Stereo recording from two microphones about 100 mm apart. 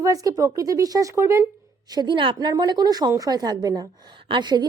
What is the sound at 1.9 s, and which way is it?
A woman's voice, 45° right (ahead or behind).